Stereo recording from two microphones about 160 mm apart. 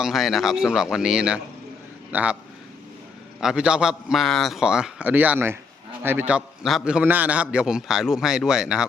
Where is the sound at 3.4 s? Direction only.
5° right (ahead or behind).